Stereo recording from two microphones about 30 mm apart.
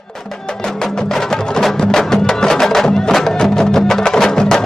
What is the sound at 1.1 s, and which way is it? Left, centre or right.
Music, centre.